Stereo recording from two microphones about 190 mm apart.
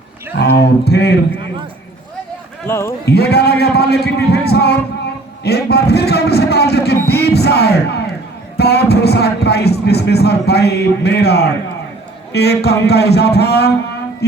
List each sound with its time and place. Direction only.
0.3 s speech: 60° left (ahead or behind)
2.6 s speech: 15° left (ahead or behind)
3.1 s speech: 60° left (ahead or behind)